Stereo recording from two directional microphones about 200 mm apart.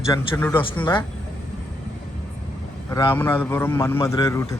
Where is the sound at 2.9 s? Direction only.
20° left (ahead or behind).